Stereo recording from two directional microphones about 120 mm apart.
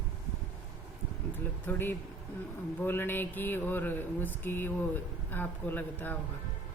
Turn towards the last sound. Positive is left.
turn(degrees=15)  # may be behind; listen again after turning